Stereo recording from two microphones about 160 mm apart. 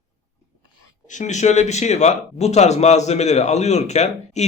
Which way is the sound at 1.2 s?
45° left (ahead or behind).